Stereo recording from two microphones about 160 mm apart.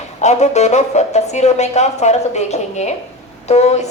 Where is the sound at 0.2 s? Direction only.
45° left (ahead or behind).